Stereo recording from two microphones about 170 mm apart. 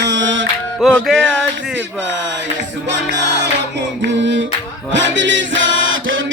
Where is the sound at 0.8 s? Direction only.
Centre (ahead or behind).